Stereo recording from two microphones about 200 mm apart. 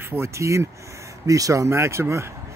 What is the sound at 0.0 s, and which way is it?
Speech, 15° right (ahead or behind).